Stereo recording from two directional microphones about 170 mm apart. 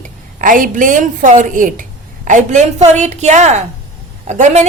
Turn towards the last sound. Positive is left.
turn(degrees=-45)  # may be behind; listen again after turning